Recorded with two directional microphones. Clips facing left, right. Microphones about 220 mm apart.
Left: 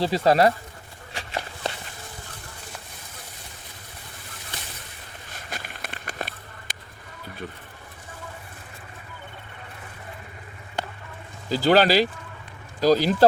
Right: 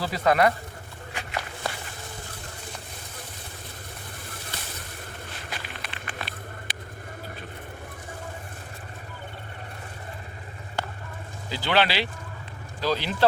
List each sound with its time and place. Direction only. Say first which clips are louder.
0.0 s speech: left 3 dB; 30° left (ahead or behind)
1.1 s walk: left 1 dB; 30° left (ahead or behind)
5.3 s a sound: left 4 dB; 45° left (ahead or behind)
11.4 s speech: left 7 dB; 40° left (ahead or behind)